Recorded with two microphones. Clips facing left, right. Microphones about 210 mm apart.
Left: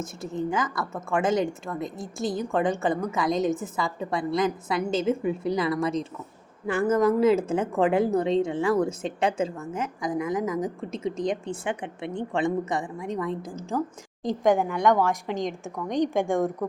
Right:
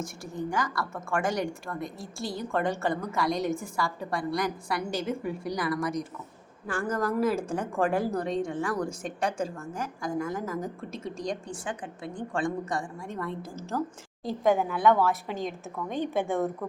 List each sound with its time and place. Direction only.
0.0 s speech: 20° left (ahead or behind)
14.8 s a woman's voice: 15° left (ahead or behind)